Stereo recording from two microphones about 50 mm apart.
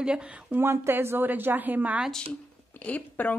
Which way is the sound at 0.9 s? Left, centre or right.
Right.